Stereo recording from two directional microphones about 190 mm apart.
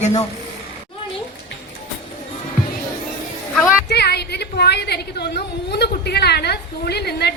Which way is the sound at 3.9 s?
60° left (ahead or behind).